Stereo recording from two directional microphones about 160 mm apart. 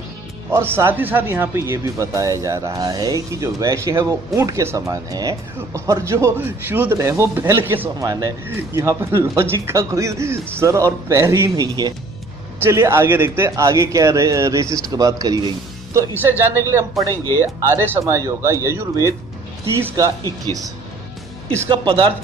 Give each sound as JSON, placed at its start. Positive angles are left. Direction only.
{"t": 0.5, "sound": "speech", "side_deg": -15}
{"t": 17.1, "sound": "speech", "side_deg": 20}
{"t": 17.4, "sound": "speech", "side_deg": -15}
{"t": 21.6, "sound": "speech", "side_deg": -30}